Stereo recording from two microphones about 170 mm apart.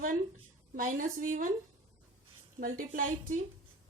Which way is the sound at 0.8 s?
50° right (ahead or behind).